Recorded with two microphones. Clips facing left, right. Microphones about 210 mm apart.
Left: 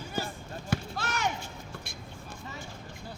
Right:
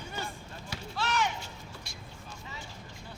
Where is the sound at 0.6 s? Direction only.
50° left (ahead or behind).